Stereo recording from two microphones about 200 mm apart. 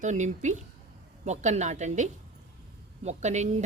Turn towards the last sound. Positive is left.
turn(degrees=-35)  # may be behind; listen again after turning